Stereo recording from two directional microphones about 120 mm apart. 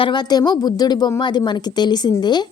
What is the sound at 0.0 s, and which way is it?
A woman's voice, 35° left (ahead or behind).